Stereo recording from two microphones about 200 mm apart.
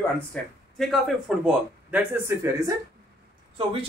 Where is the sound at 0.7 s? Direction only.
Centre (ahead or behind); by 2.8 s 15° right (ahead or behind).